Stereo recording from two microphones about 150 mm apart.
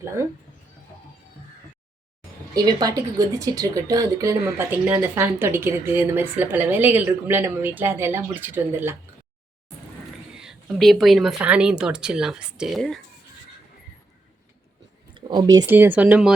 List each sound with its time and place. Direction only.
0.0 s a woman's voice: 20° right (ahead or behind)
2.6 s a woman's voice: 25° right (ahead or behind)
10.3 s a woman's voice: 5° right (ahead or behind)
15.1 s speech: 30° right (ahead or behind)
15.6 s a woman's voice: 15° right (ahead or behind)